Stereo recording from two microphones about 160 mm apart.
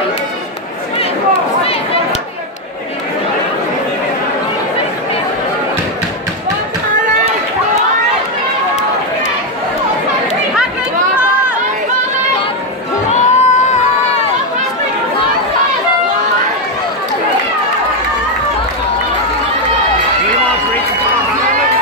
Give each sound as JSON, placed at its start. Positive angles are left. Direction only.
{"t": 13.1, "sound": "crowd", "side_deg": 45}